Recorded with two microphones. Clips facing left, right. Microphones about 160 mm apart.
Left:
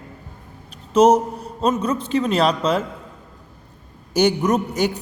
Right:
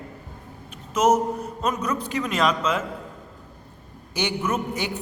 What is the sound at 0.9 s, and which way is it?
A man's voice, 30° left (ahead or behind).